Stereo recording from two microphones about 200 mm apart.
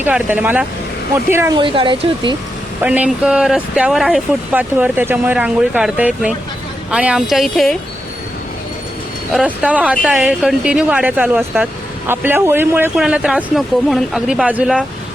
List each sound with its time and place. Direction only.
0.0 s speech: 10° right (ahead or behind)
1.5 s speech: 25° right (ahead or behind)
2.8 s speech: 5° right (ahead or behind)
9.3 s speech: 5° right (ahead or behind)